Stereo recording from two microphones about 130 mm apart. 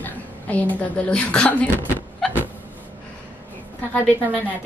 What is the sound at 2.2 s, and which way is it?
Hiccup, 5° left (ahead or behind).